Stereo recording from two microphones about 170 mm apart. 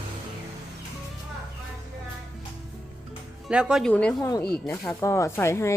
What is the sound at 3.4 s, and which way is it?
A woman's voice, 5° right (ahead or behind).